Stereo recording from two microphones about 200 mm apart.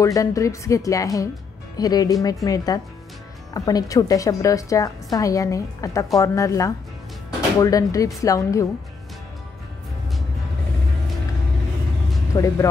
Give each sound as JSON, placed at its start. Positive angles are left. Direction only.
{"t": 0.0, "sound": "a woman's voice", "side_deg": 15}
{"t": 12.3, "sound": "a woman's voice", "side_deg": 15}